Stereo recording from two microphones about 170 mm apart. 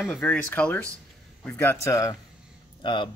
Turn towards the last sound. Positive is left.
turn(degrees=30)  # may be behind; listen again after turning